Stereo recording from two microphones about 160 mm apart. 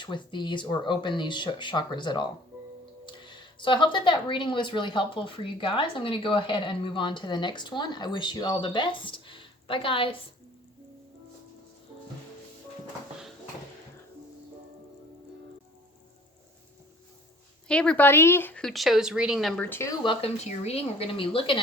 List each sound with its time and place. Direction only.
0.0 s speech: 30° left (ahead or behind)
17.7 s a woman's voice: 5° left (ahead or behind)
19.7 s speech: 15° left (ahead or behind)
20.1 s speech: 40° left (ahead or behind)